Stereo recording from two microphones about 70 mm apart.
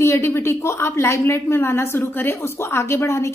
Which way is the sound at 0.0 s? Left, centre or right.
Left.